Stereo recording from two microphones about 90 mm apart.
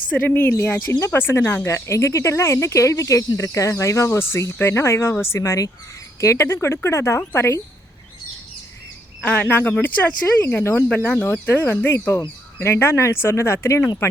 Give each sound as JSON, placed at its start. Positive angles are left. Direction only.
{"t": 0.1, "sound": "speech", "side_deg": 20}
{"t": 9.2, "sound": "speech", "side_deg": 15}